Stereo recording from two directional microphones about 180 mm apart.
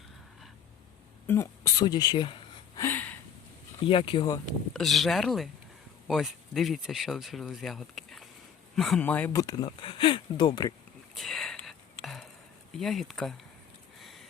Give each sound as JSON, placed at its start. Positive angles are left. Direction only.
{"t": 1.3, "sound": "speech", "side_deg": 15}
{"t": 2.8, "sound": "a sound", "side_deg": 10}
{"t": 3.8, "sound": "speech", "side_deg": 30}
{"t": 4.7, "sound": "speech", "side_deg": 0}
{"t": 11.1, "sound": "whispering", "side_deg": 0}
{"t": 12.7, "sound": "speech", "side_deg": 0}
{"t": 14.0, "sound": "a sound", "side_deg": 0}